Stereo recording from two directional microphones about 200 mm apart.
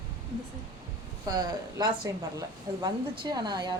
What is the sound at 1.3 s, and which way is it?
Speech, 20° right (ahead or behind).